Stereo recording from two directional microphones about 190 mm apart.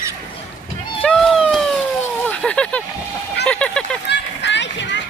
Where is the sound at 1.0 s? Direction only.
5° left (ahead or behind).